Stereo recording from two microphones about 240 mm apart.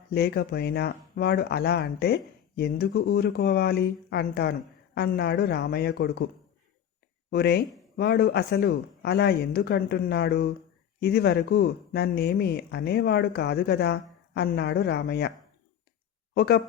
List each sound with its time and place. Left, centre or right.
0.1 s speech: left
7.3 s speech: left
16.3 s speech: left